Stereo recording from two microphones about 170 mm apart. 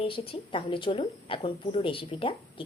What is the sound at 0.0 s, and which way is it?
A woman's voice, 30° left (ahead or behind).